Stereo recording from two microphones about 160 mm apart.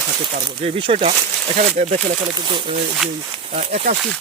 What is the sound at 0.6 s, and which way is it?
Speech, 35° right (ahead or behind).